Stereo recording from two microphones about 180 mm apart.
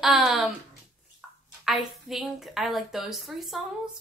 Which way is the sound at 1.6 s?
Centre (ahead or behind).